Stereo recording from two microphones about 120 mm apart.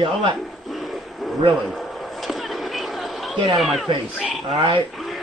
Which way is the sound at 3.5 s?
Centre (ahead or behind).